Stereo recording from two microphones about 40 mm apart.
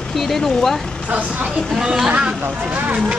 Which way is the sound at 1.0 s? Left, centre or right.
Right.